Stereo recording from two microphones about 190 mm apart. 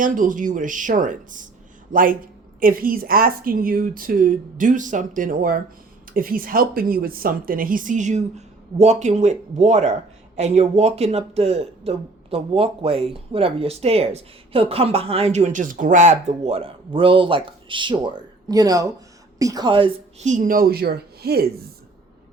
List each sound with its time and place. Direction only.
0.0 s a woman's voice: 45° right (ahead or behind); by 20.2 s 25° right (ahead or behind)
20.2 s a woman's voice: 40° right (ahead or behind)